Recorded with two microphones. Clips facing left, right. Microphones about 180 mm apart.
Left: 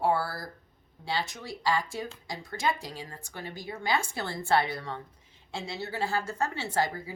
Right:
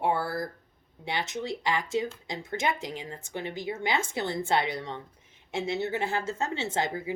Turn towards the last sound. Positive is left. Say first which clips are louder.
# even
turn(degrees=-20)  # may be behind; listen again after turning